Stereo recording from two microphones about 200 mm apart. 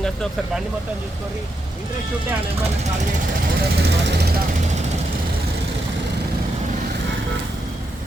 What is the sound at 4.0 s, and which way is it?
Speech, 55° right (ahead or behind).